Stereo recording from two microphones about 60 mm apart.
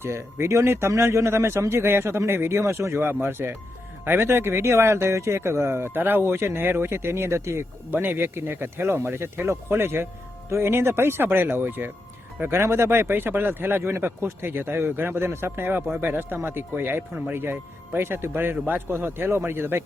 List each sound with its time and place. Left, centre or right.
0.0 s speech: right
8.0 s speech: right